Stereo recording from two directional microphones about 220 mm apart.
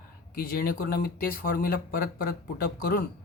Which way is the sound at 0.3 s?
40° left (ahead or behind).